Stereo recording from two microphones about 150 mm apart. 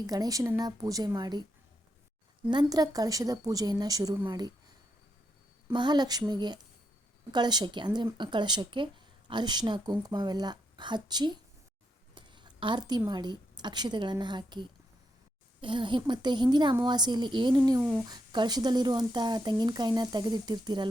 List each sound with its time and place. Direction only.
0.0 s speech: 25° right (ahead or behind)
2.5 s speech: 30° right (ahead or behind)
5.7 s speech: 30° right (ahead or behind)
12.1 s a sound: 30° right (ahead or behind)
13.1 s a woman's voice: 30° right (ahead or behind)
17.7 s speech: 20° right (ahead or behind)